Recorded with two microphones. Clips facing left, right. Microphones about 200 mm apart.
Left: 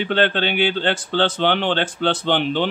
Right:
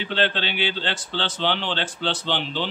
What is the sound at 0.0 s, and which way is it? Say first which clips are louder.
Speech: left 6 dB; 55° left (ahead or behind).